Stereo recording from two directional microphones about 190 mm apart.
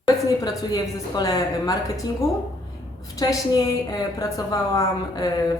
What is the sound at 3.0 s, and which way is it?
A woman's voice, 20° left (ahead or behind).